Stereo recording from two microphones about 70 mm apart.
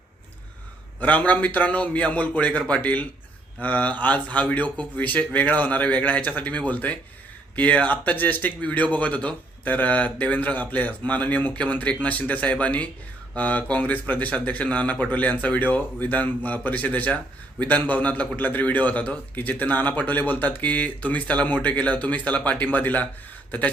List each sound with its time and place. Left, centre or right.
0.9 s speech: left
23.5 s beatboxing: left